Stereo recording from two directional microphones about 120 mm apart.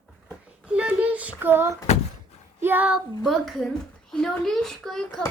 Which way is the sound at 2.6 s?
15° right (ahead or behind).